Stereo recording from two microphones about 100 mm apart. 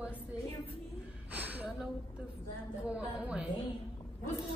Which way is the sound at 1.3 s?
15° right (ahead or behind).